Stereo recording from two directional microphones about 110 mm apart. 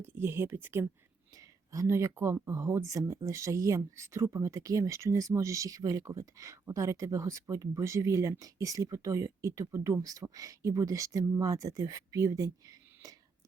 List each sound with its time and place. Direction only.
0.0 s speech: 20° right (ahead or behind)